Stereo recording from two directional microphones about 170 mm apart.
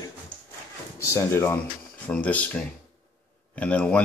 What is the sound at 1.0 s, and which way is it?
Speech, 15° left (ahead or behind).